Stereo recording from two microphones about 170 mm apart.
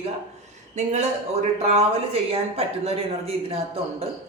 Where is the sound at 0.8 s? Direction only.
40° right (ahead or behind).